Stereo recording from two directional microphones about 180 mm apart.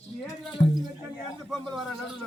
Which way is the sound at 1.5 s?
Centre (ahead or behind).